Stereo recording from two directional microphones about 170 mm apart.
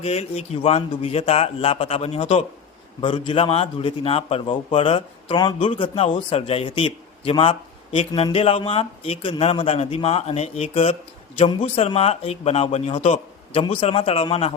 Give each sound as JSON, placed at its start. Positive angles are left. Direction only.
{"t": 0.0, "sound": "a man's voice", "side_deg": 40}